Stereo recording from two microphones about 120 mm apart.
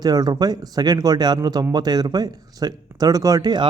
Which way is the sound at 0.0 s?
35° right (ahead or behind).